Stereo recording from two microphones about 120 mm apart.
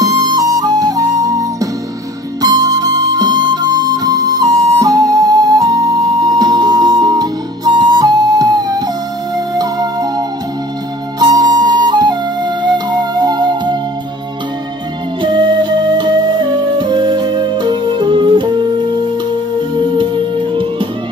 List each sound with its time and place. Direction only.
0.0 s music: 30° right (ahead or behind)
2.4 s harmonica: 30° right (ahead or behind)
6.2 s flute: 35° right (ahead or behind)
9.6 s music: 30° right (ahead or behind)
11.1 s flute: 35° right (ahead or behind)
15.2 s music: 40° right (ahead or behind)
19.8 s music: 40° right (ahead or behind)